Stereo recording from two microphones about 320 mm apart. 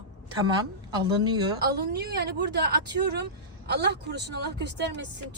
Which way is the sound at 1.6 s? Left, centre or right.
Right.